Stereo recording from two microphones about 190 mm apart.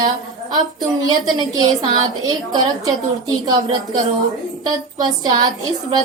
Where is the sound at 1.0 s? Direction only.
20° right (ahead or behind).